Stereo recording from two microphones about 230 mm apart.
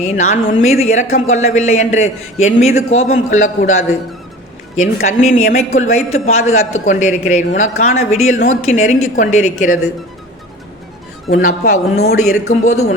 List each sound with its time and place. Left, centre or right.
0.0 s a man's voice: left
11.4 s speech: left